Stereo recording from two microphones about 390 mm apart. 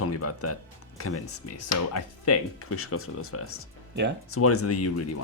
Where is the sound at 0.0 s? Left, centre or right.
Left.